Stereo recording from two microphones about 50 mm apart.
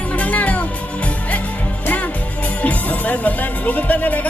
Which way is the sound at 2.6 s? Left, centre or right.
Left.